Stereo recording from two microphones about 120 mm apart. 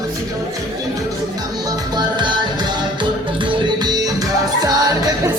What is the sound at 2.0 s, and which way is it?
Music, 40° right (ahead or behind).